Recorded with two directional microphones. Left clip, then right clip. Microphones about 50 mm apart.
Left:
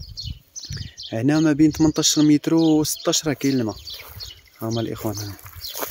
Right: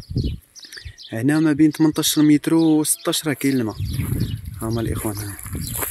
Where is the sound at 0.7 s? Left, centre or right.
Centre.